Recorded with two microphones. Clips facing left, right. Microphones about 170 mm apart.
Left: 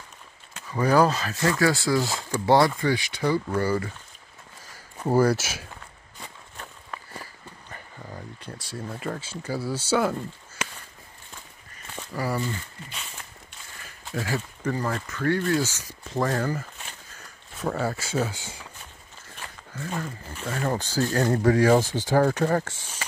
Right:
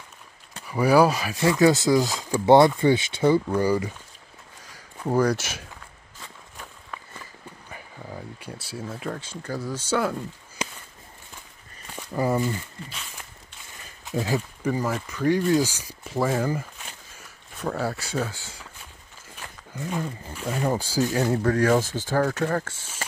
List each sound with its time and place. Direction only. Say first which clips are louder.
0.7 s speech: right 2 dB; 10° right (ahead or behind)
4.7 s speech: left 1 dB; 5° left (ahead or behind)
7.7 s speech: right 2 dB; 10° right (ahead or behind)
12.2 s speech: right 5 dB; 20° right (ahead or behind)
14.1 s speech: right 4 dB; 15° right (ahead or behind)
17.6 s speech: even; centre (ahead or behind)
18.3 s speech: left 3 dB; 20° left (ahead or behind)
19.7 s speech: right 3 dB; 15° right (ahead or behind)
21.4 s speech: left 3 dB; 10° left (ahead or behind)